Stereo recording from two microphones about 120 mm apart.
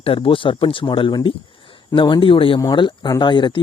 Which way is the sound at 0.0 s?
50° left (ahead or behind).